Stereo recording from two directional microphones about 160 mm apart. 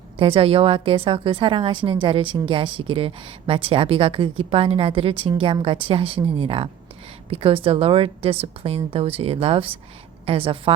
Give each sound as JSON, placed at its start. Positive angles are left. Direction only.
{"t": 0.2, "sound": "a woman's voice", "side_deg": -35}